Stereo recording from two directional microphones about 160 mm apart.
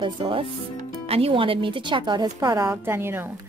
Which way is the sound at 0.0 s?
35° right (ahead or behind).